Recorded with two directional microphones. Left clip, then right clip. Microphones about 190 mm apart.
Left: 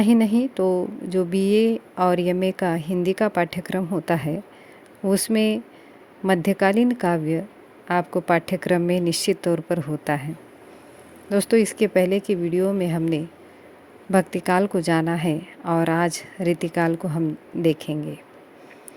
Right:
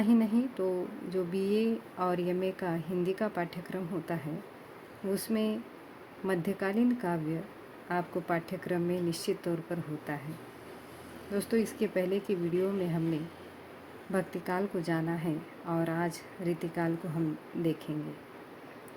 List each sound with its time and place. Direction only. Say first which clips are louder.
0.0 s speech: left 9 dB; 45° left (ahead or behind)
11.3 s speech: left 12 dB; 45° left (ahead or behind)